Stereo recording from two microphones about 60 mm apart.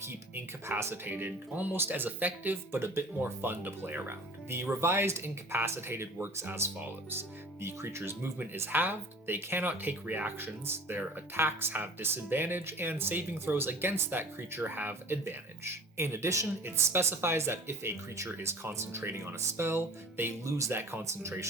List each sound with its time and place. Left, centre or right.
0.0 s speech: right
1.1 s speech: right
8.7 s speech: right
15.2 s speech: right
20.4 s speech: right